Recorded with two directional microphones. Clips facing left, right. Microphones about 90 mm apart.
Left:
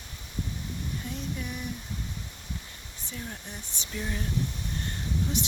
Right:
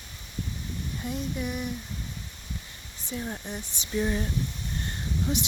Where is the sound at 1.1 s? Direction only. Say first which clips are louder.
Right 8 dB; 10° right (ahead or behind).